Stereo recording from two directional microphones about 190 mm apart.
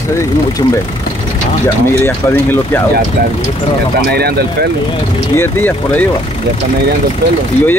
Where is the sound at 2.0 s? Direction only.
10° left (ahead or behind).